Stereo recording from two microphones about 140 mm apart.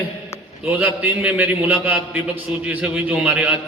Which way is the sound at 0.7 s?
15° right (ahead or behind).